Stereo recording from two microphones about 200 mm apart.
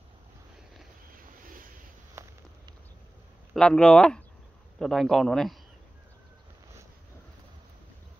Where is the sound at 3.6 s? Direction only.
5° left (ahead or behind).